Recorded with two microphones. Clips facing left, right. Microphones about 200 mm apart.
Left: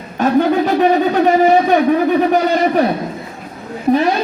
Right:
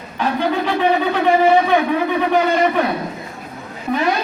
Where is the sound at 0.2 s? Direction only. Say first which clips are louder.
Left 6 dB; 45° left (ahead or behind).